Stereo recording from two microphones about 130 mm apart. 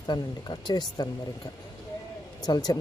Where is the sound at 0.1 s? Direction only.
35° left (ahead or behind).